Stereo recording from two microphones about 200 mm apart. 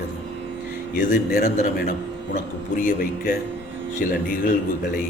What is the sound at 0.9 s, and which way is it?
A man's voice, 45° left (ahead or behind).